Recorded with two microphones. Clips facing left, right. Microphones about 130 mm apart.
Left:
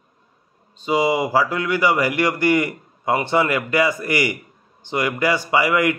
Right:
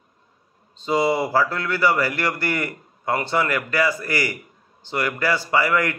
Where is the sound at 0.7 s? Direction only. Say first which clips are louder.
Left 1 dB; 10° left (ahead or behind).